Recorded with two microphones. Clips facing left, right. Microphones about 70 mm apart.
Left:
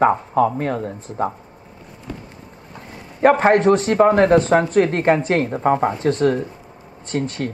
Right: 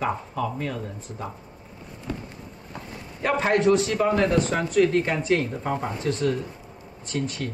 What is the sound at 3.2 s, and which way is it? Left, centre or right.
Speech, left.